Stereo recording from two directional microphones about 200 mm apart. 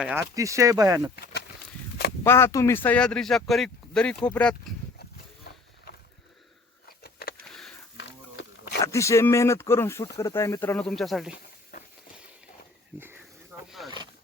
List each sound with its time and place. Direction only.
0.0 s speech: 5° right (ahead or behind)
0.3 s speech: 15° right (ahead or behind)
2.2 s speech: 10° left (ahead or behind)
6.8 s a sound: 50° left (ahead or behind)
7.4 s a sound: centre (ahead or behind)
8.8 s speech: 15° left (ahead or behind); by 11.3 s centre (ahead or behind)
13.0 s snake: 10° right (ahead or behind)
13.7 s wild animals: centre (ahead or behind)